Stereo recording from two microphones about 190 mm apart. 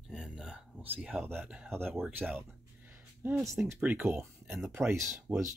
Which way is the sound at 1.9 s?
Centre (ahead or behind).